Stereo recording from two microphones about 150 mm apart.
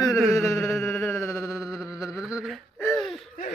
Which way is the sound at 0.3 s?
15° left (ahead or behind).